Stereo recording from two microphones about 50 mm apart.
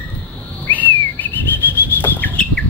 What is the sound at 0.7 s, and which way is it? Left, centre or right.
Bird flight, left.